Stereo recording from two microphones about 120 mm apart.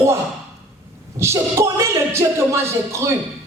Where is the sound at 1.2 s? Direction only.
25° right (ahead or behind).